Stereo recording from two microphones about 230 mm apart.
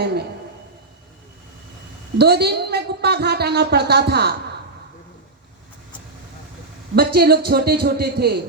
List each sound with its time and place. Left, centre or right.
0.0 s a woman's voice: right
2.1 s a woman's voice: right
6.9 s a woman's voice: right